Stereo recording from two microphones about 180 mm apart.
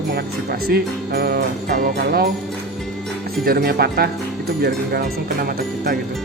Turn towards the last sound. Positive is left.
turn(degrees=-60)  # may be behind; listen again after turning